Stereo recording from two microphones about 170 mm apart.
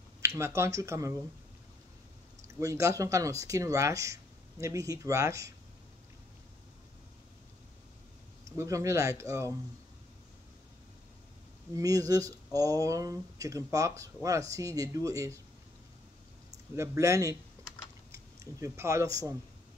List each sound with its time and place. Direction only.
0.2 s speech: 15° right (ahead or behind)
2.4 s speech: 15° right (ahead or behind)
8.5 s speech: 20° right (ahead or behind)
11.7 s speech: 20° right (ahead or behind)
16.7 s speech: 15° right (ahead or behind)
17.6 s typing: 15° right (ahead or behind)
18.1 s speech: 15° right (ahead or behind)